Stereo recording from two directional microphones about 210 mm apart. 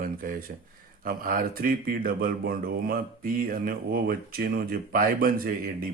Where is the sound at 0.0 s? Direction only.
40° right (ahead or behind).